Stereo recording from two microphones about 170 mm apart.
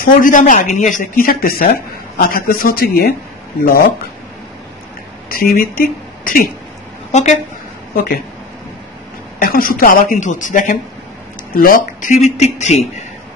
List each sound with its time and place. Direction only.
0.0 s speech: 50° left (ahead or behind)
5.3 s speech: 60° left (ahead or behind)
7.1 s a woman's voice: 45° left (ahead or behind)
9.4 s a woman's voice: 55° left (ahead or behind)